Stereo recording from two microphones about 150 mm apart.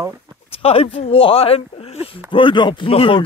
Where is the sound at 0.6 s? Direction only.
40° left (ahead or behind).